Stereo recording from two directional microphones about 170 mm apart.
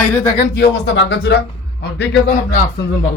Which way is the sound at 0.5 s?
85° left.